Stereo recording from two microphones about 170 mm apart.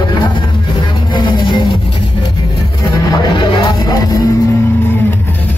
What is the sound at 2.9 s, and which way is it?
Music, 25° left (ahead or behind).